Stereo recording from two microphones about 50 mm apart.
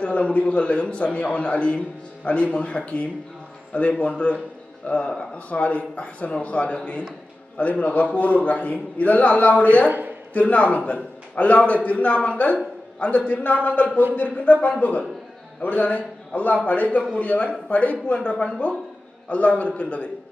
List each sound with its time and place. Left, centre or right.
0.0 s a man's voice: left
9.8 s speech: right
10.3 s a man's voice: left